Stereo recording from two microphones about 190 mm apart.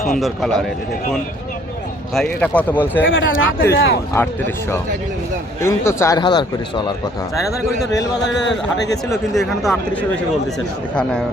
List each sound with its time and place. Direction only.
0.2 s speech: centre (ahead or behind)
2.1 s a man's voice: 5° left (ahead or behind)
3.1 s speech: 90° left
3.6 s speech: 55° left (ahead or behind)
4.1 s a man's voice: 10° left (ahead or behind)
8.2 s a man's voice: 65° left (ahead or behind)
9.3 s speech: centre (ahead or behind)